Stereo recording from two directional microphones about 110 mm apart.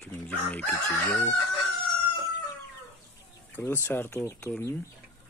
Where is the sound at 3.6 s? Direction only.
20° left (ahead or behind).